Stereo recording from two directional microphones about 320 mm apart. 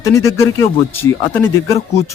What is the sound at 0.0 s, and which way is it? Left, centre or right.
Speech, centre.